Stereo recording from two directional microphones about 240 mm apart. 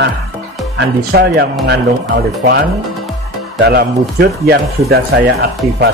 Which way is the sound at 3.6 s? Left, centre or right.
Right.